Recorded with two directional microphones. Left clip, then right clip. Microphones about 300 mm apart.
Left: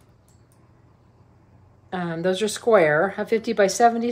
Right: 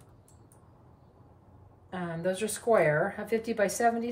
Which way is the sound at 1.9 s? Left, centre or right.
Left.